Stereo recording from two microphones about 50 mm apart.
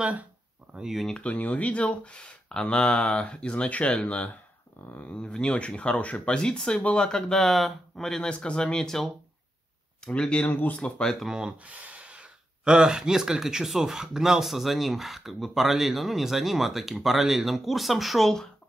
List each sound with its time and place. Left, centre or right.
0.0 s speech: right
0.8 s speech: centre
1.2 s speech: left
7.1 s speech: centre
7.3 s speech: centre
8.2 s speech: centre
10.1 s speech: left
10.8 s speech: centre
11.1 s speech: centre
11.4 s speech: right; by 18.3 s centre